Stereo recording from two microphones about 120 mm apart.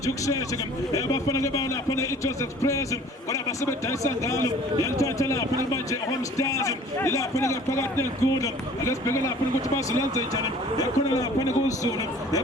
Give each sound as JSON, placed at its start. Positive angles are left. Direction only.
{"t": 0.0, "sound": "a man's voice", "side_deg": 25}